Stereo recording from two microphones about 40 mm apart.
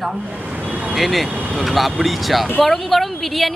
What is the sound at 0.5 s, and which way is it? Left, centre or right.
Speech, right.